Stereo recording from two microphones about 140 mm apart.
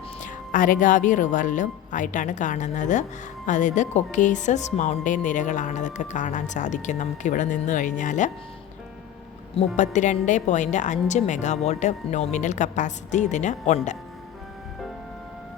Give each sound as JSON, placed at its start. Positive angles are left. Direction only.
{"t": 0.2, "sound": "speech", "side_deg": 70}
{"t": 9.6, "sound": "speech", "side_deg": 60}